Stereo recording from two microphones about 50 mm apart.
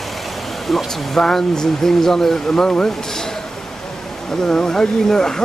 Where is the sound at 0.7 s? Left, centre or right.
Centre.